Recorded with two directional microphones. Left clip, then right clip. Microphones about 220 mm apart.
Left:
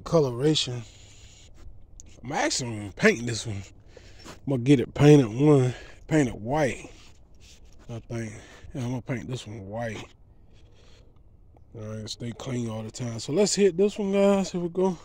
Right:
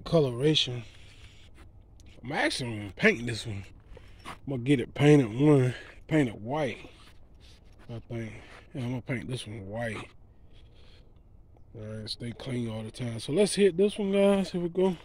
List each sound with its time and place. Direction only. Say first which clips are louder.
0.0 s a sound: left 2 dB; centre (ahead or behind)
2.0 s speech: left 2 dB; 5° left (ahead or behind)
4.5 s a man's voice: left 6 dB; 25° left (ahead or behind)
4.7 s speech: left 4 dB; 15° left (ahead or behind)
6.5 s a man's voice: left 5 dB; 25° left (ahead or behind)
7.8 s speech: left 3 dB; 15° left (ahead or behind)
11.7 s speech: left 1 dB; 15° left (ahead or behind)